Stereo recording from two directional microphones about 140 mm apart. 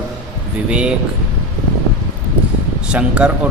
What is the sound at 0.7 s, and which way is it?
Speech, 5° right (ahead or behind).